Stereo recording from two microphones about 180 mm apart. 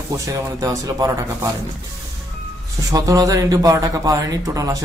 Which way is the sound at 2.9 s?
20° right (ahead or behind).